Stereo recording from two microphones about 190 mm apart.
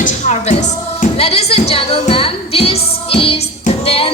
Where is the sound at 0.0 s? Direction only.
35° left (ahead or behind).